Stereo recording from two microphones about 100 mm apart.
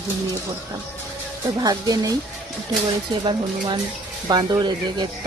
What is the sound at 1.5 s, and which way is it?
Speech, 40° right (ahead or behind).